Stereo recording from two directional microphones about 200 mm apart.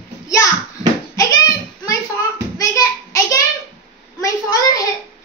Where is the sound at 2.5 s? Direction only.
15° left (ahead or behind).